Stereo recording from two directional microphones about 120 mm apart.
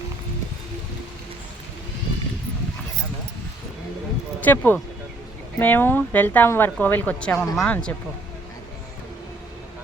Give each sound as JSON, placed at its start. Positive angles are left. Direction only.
{"t": 4.4, "sound": "speech", "side_deg": 15}